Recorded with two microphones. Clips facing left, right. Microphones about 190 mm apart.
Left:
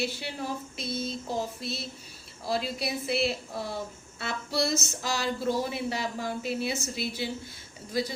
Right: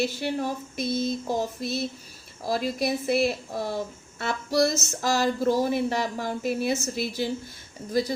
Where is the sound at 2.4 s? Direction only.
45° right (ahead or behind).